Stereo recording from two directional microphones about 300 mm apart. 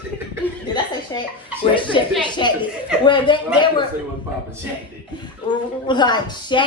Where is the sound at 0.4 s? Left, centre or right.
Centre.